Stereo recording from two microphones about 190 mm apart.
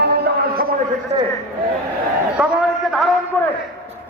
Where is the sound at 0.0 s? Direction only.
55° right (ahead or behind).